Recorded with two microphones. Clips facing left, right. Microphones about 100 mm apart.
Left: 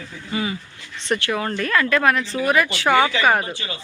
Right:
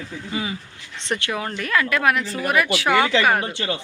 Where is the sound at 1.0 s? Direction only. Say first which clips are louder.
Left 3 dB; 20° right (ahead or behind); by 3.1 s centre (ahead or behind).